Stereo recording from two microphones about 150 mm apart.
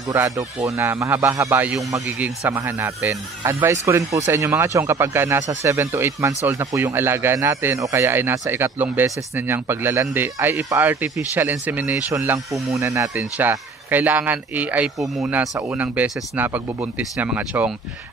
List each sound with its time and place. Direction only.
0.1 s speech: 15° right (ahead or behind)